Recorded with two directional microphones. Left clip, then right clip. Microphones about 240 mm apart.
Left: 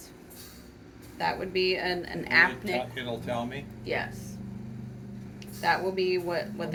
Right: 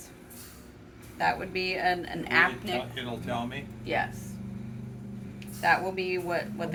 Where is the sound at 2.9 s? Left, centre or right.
Centre.